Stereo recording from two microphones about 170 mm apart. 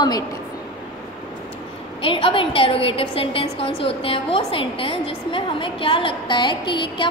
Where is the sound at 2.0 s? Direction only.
30° left (ahead or behind).